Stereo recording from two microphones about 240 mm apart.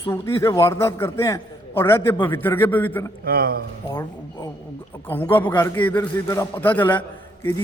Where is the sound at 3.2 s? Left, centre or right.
Right.